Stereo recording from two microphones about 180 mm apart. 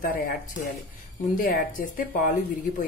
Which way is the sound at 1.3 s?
50° left (ahead or behind).